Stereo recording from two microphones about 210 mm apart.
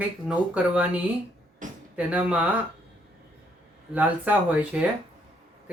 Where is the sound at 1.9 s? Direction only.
5° right (ahead or behind).